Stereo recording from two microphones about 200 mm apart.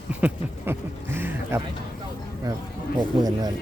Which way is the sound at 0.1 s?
5° right (ahead or behind).